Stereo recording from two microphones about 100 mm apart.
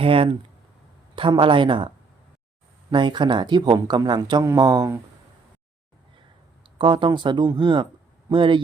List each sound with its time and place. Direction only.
0.0 s speech: 70° right (ahead or behind)
1.1 s speech: 55° right (ahead or behind)
2.9 s speech: 50° right (ahead or behind)
6.7 s speech: 55° right (ahead or behind)